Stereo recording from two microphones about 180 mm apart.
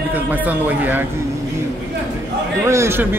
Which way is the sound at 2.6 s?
15° right (ahead or behind).